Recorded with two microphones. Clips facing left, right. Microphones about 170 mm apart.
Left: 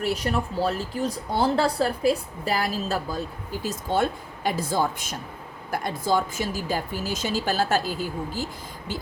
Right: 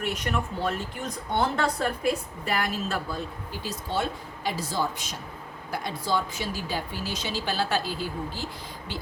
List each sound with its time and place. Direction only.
0.0 s a woman's voice: 35° left (ahead or behind)
3.6 s a woman's voice: 50° left (ahead or behind)